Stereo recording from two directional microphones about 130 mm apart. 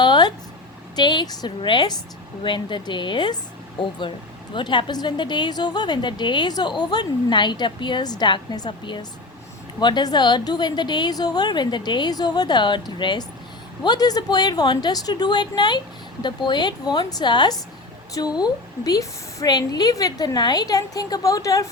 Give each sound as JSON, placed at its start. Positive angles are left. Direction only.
{"t": 0.0, "sound": "a sound", "side_deg": 35}
{"t": 0.9, "sound": "a woman's voice", "side_deg": 35}
{"t": 4.5, "sound": "a woman's voice", "side_deg": 35}